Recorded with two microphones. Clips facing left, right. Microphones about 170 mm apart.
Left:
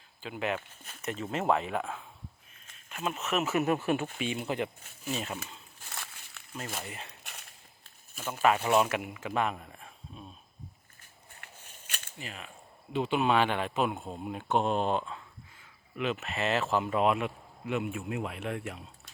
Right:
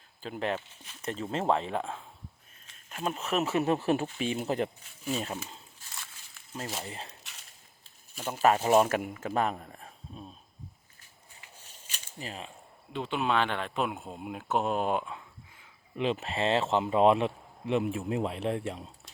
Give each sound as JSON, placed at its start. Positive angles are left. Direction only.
{"t": 0.2, "sound": "a man's voice", "side_deg": -35}
{"t": 5.9, "sound": "a sound", "side_deg": 60}
{"t": 6.8, "sound": "speech", "side_deg": -30}
{"t": 8.1, "sound": "speech", "side_deg": -45}
{"t": 11.4, "sound": "biting", "side_deg": 60}
{"t": 11.9, "sound": "camera", "side_deg": 60}
{"t": 12.2, "sound": "speech", "side_deg": -30}
{"t": 12.9, "sound": "speech", "side_deg": 5}
{"t": 16.0, "sound": "a man's voice", "side_deg": -30}